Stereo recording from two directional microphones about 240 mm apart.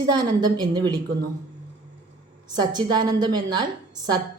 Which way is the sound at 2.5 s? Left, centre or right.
Centre.